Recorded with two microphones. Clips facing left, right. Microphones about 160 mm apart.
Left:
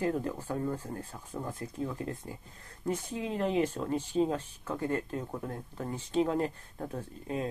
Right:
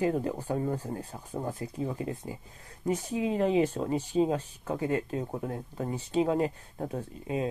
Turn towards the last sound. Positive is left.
turn(degrees=-15)  # may be behind; listen again after turning